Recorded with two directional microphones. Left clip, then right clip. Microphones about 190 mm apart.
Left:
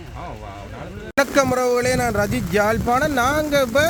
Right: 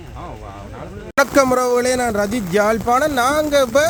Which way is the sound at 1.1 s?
15° right (ahead or behind).